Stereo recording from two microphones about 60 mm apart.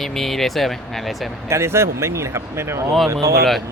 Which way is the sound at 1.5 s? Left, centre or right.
Right.